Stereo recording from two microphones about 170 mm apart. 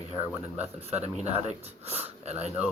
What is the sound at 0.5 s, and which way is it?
Speech, 40° right (ahead or behind).